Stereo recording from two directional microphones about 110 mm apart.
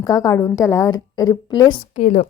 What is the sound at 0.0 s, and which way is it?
A woman's voice, 30° left (ahead or behind).